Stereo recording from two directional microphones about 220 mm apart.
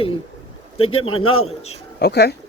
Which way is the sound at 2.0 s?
50° left (ahead or behind).